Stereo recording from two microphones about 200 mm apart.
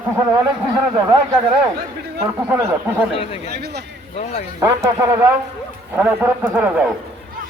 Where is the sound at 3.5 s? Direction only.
55° right (ahead or behind).